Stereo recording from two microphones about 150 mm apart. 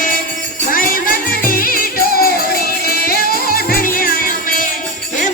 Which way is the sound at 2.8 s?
90° left.